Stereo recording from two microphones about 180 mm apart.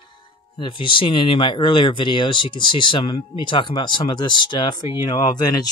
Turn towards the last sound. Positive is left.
turn(degrees=20)  # may be behind; listen again after turning